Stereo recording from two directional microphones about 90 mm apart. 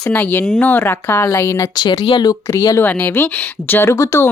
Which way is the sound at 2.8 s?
20° left (ahead or behind).